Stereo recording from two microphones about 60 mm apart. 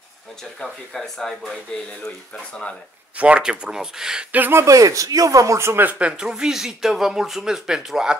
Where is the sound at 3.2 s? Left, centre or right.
Centre.